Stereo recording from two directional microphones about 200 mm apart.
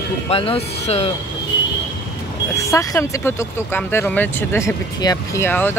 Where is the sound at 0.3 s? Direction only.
30° left (ahead or behind).